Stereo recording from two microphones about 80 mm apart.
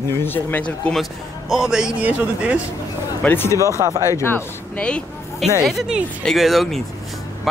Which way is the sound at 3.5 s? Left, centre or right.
Right.